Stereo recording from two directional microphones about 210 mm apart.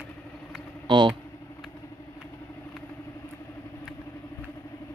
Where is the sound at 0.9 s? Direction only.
20° right (ahead or behind).